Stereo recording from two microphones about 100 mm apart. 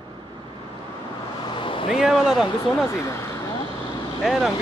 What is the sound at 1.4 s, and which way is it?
Vehicle, 55° left (ahead or behind).